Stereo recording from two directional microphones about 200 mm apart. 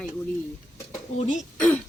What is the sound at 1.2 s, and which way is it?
Speech, 40° left (ahead or behind).